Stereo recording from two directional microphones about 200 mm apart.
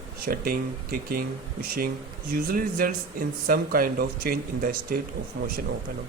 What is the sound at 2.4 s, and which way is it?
Speech, 45° right (ahead or behind).